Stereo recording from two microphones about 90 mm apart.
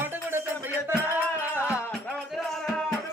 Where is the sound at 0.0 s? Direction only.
25° right (ahead or behind).